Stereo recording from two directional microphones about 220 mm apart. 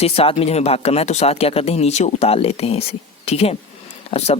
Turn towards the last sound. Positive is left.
turn(degrees=30)  # may be behind; listen again after turning